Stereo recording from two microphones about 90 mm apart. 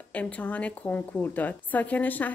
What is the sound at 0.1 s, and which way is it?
A woman's voice, 15° left (ahead or behind).